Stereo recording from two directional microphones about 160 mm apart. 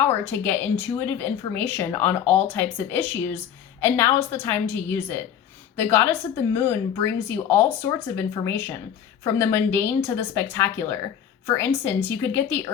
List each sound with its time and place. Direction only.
0.1 s speech: 15° left (ahead or behind)